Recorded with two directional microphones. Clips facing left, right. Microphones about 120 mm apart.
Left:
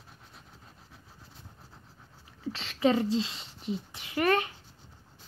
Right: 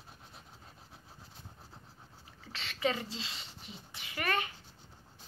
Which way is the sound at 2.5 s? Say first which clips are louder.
Left 8 dB; 30° left (ahead or behind).